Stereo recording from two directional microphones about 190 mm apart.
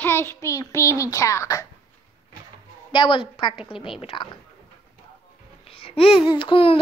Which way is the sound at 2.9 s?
25° left (ahead or behind).